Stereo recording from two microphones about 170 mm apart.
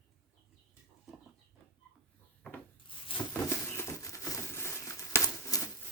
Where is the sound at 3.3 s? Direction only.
15° left (ahead or behind).